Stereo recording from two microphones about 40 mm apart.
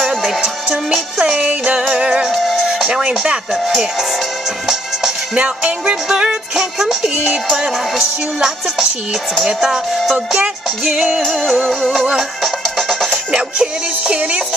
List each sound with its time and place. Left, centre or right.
0.4 s music: right
2.9 s chopping: right
3.5 s speech: centre
5.3 s music: right; by 8.8 s centre
10.3 s music: centre
12.6 s music: centre
13.1 s music: centre